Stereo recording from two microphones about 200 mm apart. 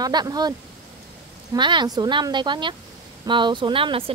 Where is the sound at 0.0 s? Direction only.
20° right (ahead or behind).